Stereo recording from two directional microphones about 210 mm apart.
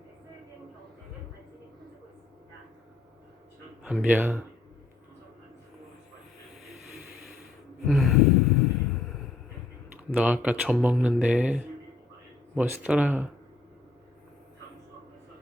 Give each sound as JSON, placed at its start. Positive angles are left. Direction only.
{"t": 3.8, "sound": "speech", "side_deg": -5}
{"t": 6.8, "sound": "vehicle", "side_deg": 0}
{"t": 7.9, "sound": "gasp", "side_deg": 0}
{"t": 9.0, "sound": "a sound", "side_deg": 0}
{"t": 10.2, "sound": "speech", "side_deg": -5}